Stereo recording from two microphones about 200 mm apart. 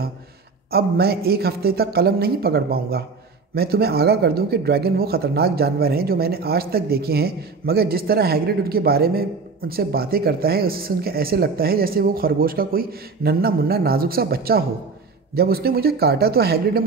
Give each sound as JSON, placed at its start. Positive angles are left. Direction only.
{"t": 0.7, "sound": "speech", "side_deg": -50}